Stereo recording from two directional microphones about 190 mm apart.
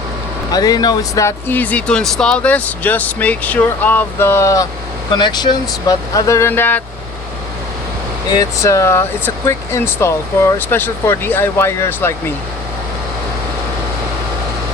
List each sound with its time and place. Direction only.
0.5 s speech: 20° left (ahead or behind)
8.3 s speech: 20° left (ahead or behind)